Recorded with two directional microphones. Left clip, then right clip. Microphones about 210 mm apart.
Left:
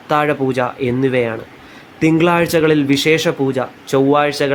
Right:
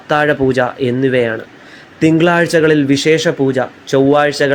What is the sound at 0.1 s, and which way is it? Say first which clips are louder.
Speech: right 3 dB; 5° right (ahead or behind).